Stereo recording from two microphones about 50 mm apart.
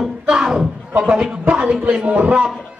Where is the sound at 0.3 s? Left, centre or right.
Centre.